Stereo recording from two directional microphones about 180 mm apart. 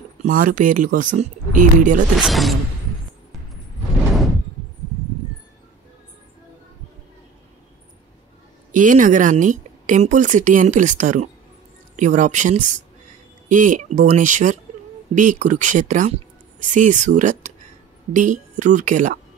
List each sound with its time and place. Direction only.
0.2 s a woman's voice: 50° right (ahead or behind)
2.1 s speech: centre (ahead or behind)
8.7 s a woman's voice: 45° right (ahead or behind)